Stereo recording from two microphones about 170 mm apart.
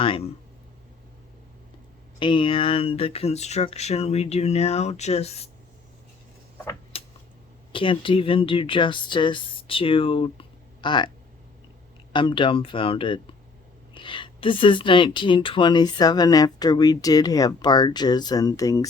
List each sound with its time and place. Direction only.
0.0 s speech: 30° left (ahead or behind)
2.1 s speech: 30° left (ahead or behind)
6.9 s a sound: 35° left (ahead or behind)
7.7 s speech: 30° left (ahead or behind)
12.1 s speech: 30° left (ahead or behind)